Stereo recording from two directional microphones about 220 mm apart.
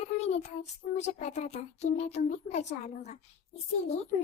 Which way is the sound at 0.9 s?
30° left (ahead or behind).